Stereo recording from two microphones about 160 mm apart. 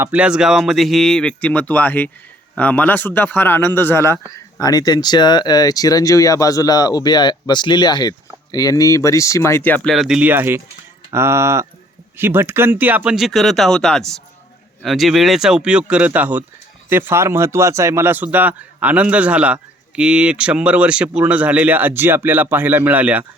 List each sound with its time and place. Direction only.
0.0 s speech: 10° right (ahead or behind); by 9.9 s 10° left (ahead or behind)
9.9 s speech: centre (ahead or behind)